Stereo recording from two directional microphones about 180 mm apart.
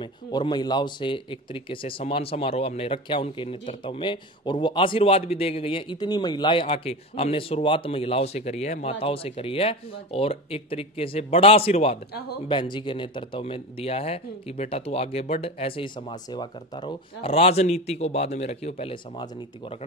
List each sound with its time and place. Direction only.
0.0 s speech: 25° left (ahead or behind)